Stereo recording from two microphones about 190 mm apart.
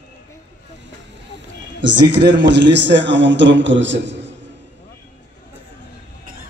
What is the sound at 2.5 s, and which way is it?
A man's voice, 70° right (ahead or behind).